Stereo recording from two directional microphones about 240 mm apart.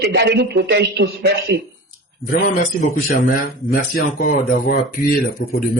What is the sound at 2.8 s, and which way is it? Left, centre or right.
A man's voice, left.